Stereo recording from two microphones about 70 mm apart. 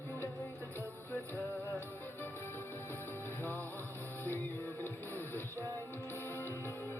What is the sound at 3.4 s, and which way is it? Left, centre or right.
Music, left.